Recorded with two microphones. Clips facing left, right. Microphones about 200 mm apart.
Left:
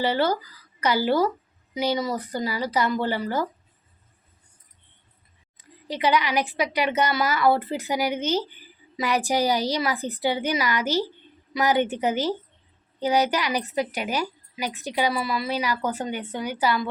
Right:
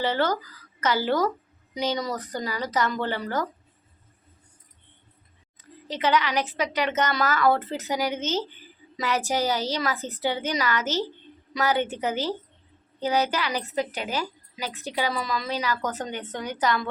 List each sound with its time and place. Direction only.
0.0 s speech: 10° left (ahead or behind)
5.5 s speech: 15° left (ahead or behind)